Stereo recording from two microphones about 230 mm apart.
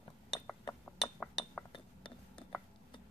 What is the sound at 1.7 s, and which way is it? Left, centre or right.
Glass, left.